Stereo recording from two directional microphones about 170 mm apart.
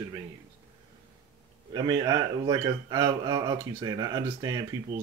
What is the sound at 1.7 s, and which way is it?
A man's voice, 25° right (ahead or behind).